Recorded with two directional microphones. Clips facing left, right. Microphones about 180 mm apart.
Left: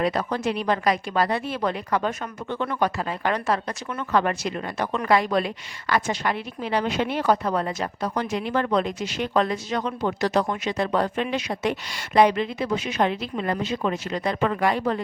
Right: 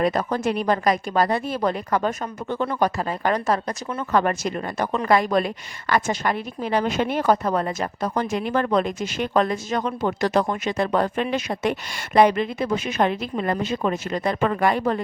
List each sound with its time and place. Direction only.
0.0 s a woman's voice: 45° right (ahead or behind)